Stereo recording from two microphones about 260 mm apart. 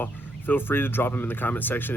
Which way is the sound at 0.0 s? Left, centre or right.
Centre.